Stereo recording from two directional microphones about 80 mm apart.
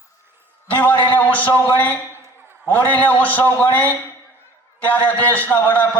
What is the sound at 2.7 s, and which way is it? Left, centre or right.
A man's voice, left.